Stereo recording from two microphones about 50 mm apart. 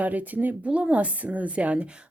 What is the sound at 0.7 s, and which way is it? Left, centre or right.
Speech, right.